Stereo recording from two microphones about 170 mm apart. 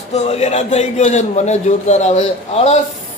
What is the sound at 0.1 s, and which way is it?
A man's voice, 40° left (ahead or behind).